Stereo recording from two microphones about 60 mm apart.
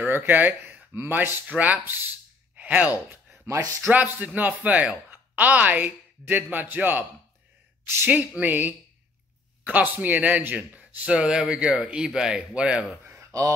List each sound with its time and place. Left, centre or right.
0.0 s a sound: right
1.0 s speech: right
1.5 s speech: right
7.8 s speech: right
8.4 s speech: right
13.0 s a sound: right
13.3 s speech: right